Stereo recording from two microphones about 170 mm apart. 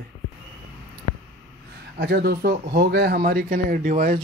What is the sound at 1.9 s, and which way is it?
Speech, 75° right (ahead or behind).